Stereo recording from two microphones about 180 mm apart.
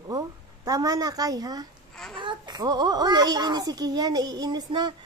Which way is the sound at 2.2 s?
25° right (ahead or behind).